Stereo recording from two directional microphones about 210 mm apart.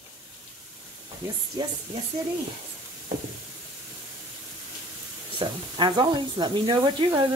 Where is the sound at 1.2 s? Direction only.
10° right (ahead or behind).